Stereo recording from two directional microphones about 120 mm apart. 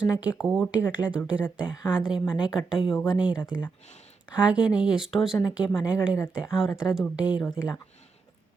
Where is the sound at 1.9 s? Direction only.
10° right (ahead or behind).